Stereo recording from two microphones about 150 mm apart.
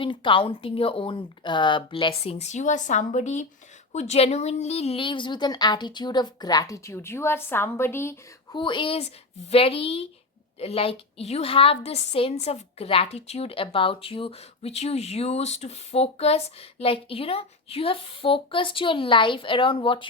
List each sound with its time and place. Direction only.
0.0 s a woman's voice: 35° left (ahead or behind); by 8.2 s 15° left (ahead or behind)
8.5 s a woman's voice: 35° left (ahead or behind)